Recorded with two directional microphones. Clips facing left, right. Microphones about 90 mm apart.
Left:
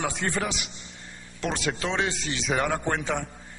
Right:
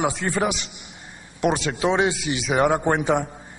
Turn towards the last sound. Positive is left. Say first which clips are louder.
# right 7 dB
turn(degrees=-15)  # may be behind; listen again after turning